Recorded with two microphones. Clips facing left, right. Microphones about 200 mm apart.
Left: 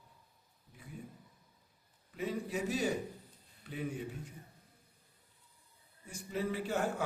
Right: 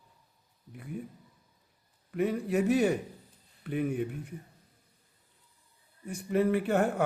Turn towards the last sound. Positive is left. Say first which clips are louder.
# right 8 dB
turn(degrees=-60)  # may be behind; listen again after turning